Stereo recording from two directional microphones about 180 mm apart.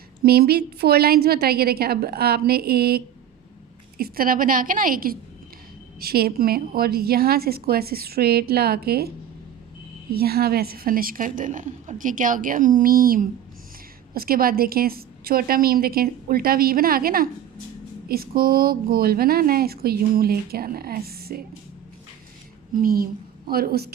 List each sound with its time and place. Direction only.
0.2 s a woman's voice: 60° right (ahead or behind)
22.7 s speech: 55° right (ahead or behind)